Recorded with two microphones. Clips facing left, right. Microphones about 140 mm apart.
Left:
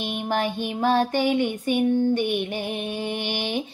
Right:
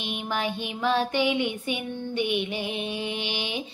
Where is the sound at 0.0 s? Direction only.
45° left (ahead or behind).